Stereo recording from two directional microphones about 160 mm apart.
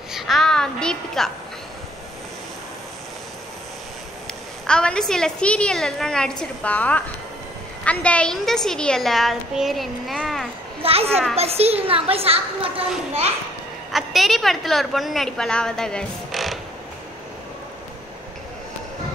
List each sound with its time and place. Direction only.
0.1 s a sound: centre (ahead or behind)
4.6 s a woman's voice: 5° left (ahead or behind)
10.8 s a child's voice: 40° right (ahead or behind)
13.9 s a woman's voice: centre (ahead or behind)